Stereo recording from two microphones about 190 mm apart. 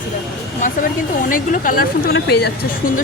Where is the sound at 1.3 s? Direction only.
45° left (ahead or behind).